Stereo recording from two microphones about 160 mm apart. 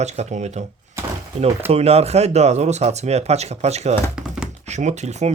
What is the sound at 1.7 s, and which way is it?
Speech, 40° right (ahead or behind).